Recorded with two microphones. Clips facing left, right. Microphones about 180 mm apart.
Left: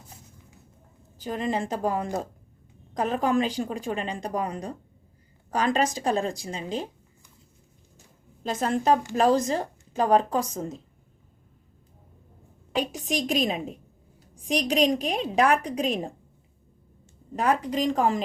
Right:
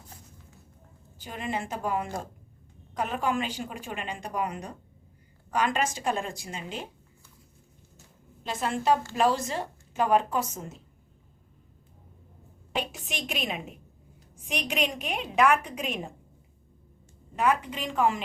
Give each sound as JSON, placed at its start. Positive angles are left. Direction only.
{"t": 1.2, "sound": "a woman's voice", "side_deg": 40}
{"t": 8.6, "sound": "a woman's voice", "side_deg": 40}
{"t": 12.7, "sound": "a woman's voice", "side_deg": 40}
{"t": 17.3, "sound": "a woman's voice", "side_deg": 35}